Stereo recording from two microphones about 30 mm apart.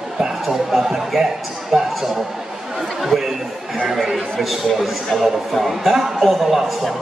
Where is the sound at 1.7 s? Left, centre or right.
Centre.